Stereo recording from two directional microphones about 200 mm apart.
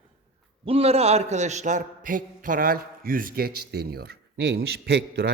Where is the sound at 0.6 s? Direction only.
30° right (ahead or behind).